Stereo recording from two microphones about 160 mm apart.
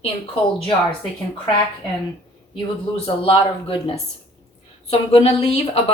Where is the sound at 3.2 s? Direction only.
35° left (ahead or behind).